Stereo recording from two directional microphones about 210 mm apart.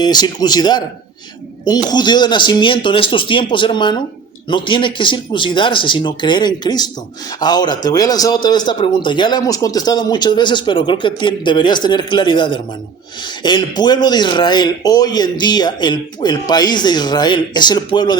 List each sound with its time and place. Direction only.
0.0 s a man's voice: 20° left (ahead or behind)